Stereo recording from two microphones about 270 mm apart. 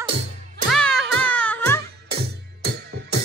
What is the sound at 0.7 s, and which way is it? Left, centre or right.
Music, centre.